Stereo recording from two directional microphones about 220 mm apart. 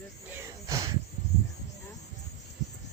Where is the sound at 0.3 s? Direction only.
15° right (ahead or behind).